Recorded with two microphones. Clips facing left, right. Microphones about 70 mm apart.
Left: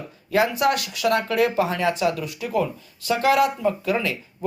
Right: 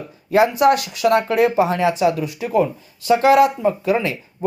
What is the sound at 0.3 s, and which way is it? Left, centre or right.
Speech, right.